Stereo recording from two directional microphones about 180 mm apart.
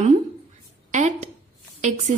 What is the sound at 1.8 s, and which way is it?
Speech, 40° right (ahead or behind).